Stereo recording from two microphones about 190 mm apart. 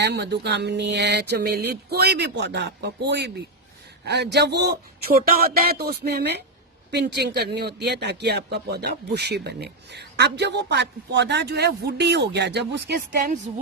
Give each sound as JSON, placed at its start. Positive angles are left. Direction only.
{"t": 0.0, "sound": "speech", "side_deg": -60}